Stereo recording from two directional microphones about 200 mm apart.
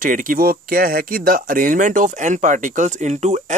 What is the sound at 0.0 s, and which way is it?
Speech, 45° right (ahead or behind).